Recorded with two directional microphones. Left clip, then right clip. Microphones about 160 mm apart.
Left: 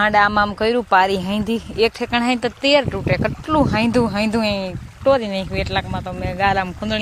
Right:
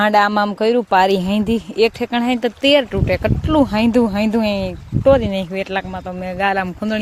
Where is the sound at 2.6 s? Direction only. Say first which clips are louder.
Right 2 dB; 30° right (ahead or behind).